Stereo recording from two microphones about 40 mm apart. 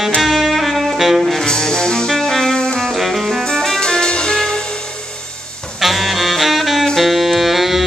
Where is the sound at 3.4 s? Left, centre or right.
Centre.